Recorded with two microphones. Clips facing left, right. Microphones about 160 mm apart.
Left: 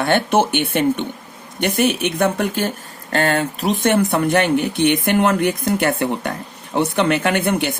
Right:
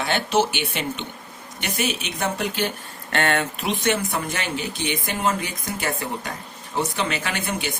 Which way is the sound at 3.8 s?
60° left (ahead or behind).